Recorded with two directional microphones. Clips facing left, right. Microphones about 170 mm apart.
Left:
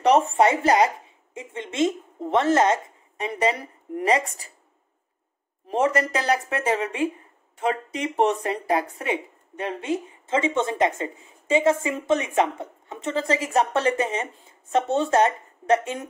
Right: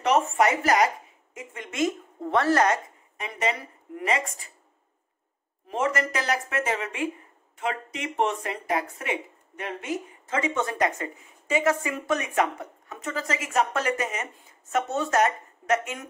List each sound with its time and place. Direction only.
0.0 s a woman's voice: 35° left (ahead or behind)
5.7 s a woman's voice: 30° left (ahead or behind)